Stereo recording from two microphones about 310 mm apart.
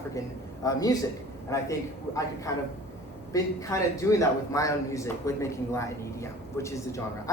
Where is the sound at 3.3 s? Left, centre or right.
Centre.